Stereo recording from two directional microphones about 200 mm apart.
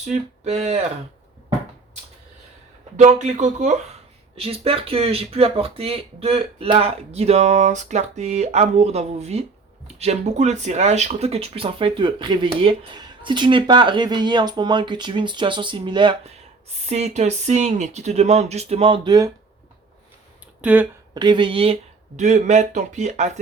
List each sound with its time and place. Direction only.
0.0 s speech: 30° right (ahead or behind)
3.0 s speech: 35° right (ahead or behind)
16.9 s speech: 35° right (ahead or behind)
20.6 s speech: 5° right (ahead or behind)
21.1 s speech: 20° right (ahead or behind)